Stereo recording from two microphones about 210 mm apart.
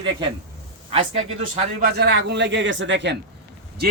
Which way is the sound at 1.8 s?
50° right (ahead or behind).